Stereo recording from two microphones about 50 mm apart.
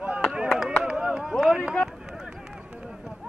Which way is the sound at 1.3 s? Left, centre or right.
Centre.